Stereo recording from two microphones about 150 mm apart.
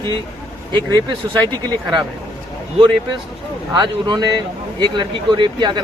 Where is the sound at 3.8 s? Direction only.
30° right (ahead or behind).